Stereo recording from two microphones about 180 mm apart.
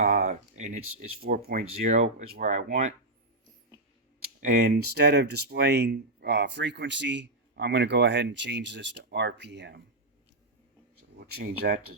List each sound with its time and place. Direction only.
0.0 s a sound: 45° right (ahead or behind)
1.2 s speech: 55° right (ahead or behind)
1.9 s speech: 40° right (ahead or behind)
4.4 s speech: 60° right (ahead or behind)
11.2 s speech: 65° right (ahead or behind)